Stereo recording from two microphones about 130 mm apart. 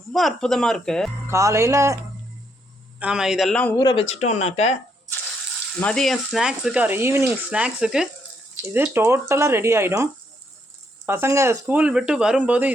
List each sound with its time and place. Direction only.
0.1 s speech: centre (ahead or behind)
1.3 s speech: 25° right (ahead or behind)
3.0 s speech: 5° right (ahead or behind)
3.9 s speech: 55° left (ahead or behind)
5.8 s speech: 5° left (ahead or behind)
8.7 s speech: 15° right (ahead or behind)
11.6 s speech: 10° right (ahead or behind)